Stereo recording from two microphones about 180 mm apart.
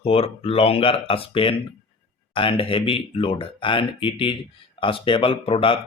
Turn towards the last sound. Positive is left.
turn(degrees=30)  # may be behind; listen again after turning